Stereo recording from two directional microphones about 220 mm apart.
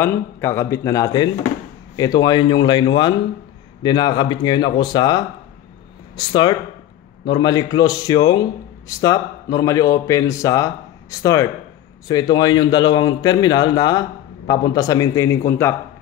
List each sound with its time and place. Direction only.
0.0 s a man's voice: 10° left (ahead or behind)